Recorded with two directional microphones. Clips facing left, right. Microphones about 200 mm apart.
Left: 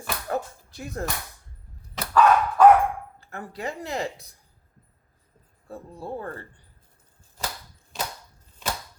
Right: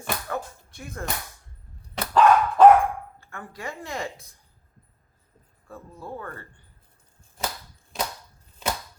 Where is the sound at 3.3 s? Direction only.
35° left (ahead or behind).